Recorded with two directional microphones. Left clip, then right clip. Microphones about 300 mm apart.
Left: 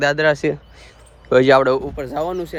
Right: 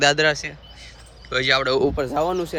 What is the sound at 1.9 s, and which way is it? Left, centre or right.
Speech, centre.